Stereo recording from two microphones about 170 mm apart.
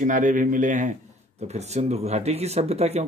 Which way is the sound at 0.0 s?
50° right (ahead or behind).